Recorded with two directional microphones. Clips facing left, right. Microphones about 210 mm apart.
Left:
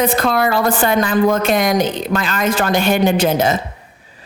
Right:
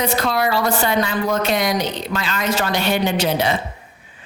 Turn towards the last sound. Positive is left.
turn(degrees=45)  # may be behind; listen again after turning